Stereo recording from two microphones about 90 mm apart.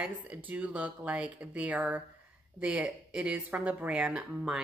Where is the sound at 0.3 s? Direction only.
20° right (ahead or behind).